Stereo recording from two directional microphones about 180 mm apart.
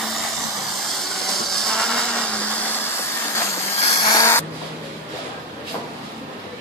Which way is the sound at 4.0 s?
20° left (ahead or behind).